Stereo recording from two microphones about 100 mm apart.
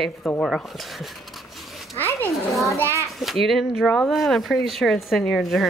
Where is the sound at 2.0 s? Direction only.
20° left (ahead or behind).